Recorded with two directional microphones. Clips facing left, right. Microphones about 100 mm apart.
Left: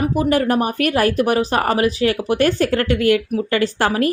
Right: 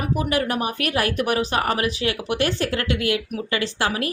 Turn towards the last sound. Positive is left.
turn(degrees=45)  # may be behind; listen again after turning